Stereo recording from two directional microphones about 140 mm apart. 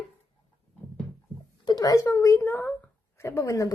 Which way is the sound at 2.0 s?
20° left (ahead or behind).